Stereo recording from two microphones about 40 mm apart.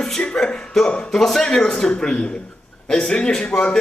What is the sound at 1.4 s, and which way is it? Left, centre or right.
A man's voice, left.